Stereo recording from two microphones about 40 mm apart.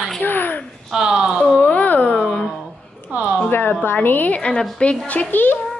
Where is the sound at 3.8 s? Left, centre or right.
Left.